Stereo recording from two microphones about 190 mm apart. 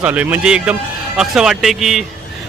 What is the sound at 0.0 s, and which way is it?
Speech, 10° right (ahead or behind).